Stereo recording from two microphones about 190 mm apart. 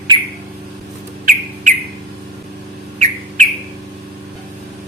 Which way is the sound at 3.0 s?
40° right (ahead or behind).